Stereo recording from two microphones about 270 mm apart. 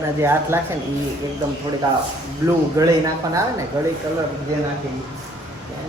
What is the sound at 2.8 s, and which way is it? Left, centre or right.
Speech, centre.